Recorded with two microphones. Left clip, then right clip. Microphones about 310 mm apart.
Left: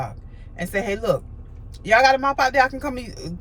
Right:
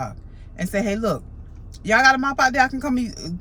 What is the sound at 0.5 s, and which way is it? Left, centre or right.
A man's voice, centre.